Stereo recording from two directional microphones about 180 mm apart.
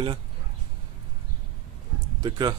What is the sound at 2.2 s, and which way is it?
Speech, 25° right (ahead or behind).